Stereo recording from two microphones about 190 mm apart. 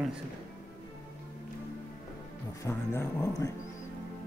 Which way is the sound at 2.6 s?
15° left (ahead or behind).